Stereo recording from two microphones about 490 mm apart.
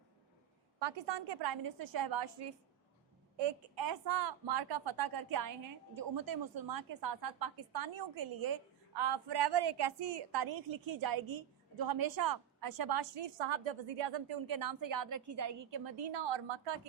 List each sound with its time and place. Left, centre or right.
0.8 s a woman's voice: right
13.4 s a woman's voice: right
16.0 s a woman's voice: right